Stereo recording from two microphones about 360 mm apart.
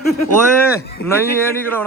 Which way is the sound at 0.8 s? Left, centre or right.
Left.